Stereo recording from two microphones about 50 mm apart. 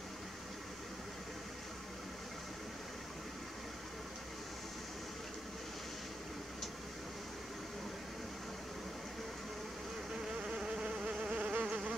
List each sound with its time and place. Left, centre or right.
10.4 s insect: centre
11.6 s insect: centre